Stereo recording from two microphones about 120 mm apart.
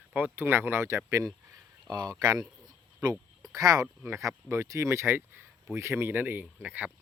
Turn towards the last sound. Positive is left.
turn(degrees=-15)  # may be behind; listen again after turning